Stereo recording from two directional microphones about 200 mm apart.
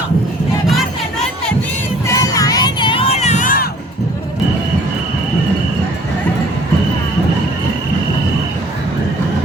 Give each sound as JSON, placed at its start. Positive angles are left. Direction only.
{"t": 2.0, "sound": "crowd", "side_deg": 15}